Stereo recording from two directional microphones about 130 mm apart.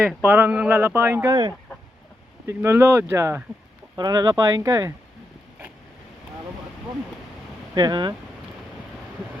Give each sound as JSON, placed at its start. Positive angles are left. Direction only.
{"t": 0.2, "sound": "speech", "side_deg": -15}
{"t": 2.5, "sound": "speech", "side_deg": -20}
{"t": 3.9, "sound": "speech", "side_deg": -30}
{"t": 7.8, "sound": "speech", "side_deg": -35}